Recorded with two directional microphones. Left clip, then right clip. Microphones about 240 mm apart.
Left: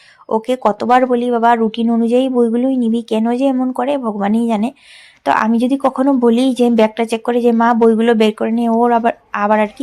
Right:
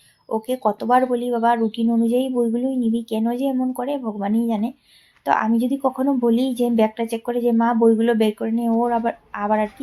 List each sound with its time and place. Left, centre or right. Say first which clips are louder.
0.3 s speech: left 6 dB; left